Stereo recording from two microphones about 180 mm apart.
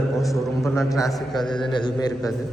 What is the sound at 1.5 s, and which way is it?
Speech, 25° left (ahead or behind).